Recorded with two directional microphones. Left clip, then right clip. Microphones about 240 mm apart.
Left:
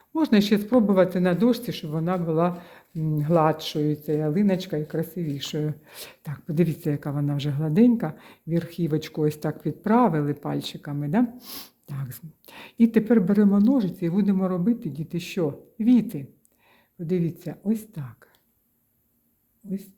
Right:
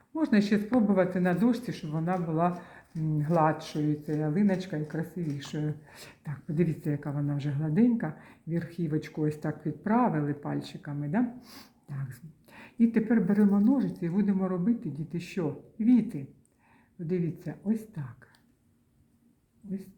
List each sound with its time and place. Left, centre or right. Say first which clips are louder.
0.1 s speech: left 6 dB; left